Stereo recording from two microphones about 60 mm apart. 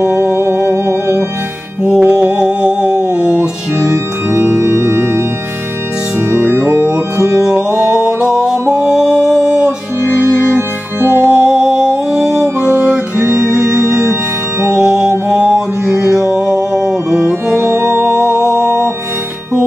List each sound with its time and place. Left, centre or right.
0.0 s music: right
0.7 s music: right
1.8 s mantra: centre
4.3 s organ: right
6.3 s music: right
6.6 s music: right
10.2 s organ: right
11.3 s music: centre
14.7 s mantra: centre
18.0 s music: centre